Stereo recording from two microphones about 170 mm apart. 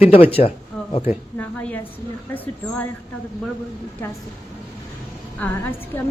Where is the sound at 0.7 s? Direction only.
5° left (ahead or behind).